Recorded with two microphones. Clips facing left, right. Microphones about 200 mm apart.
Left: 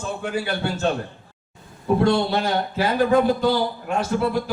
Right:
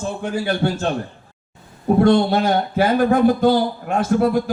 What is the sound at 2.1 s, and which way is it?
Speech, 50° right (ahead or behind).